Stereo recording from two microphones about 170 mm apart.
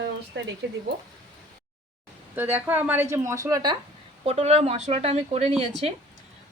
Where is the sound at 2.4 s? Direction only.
10° right (ahead or behind).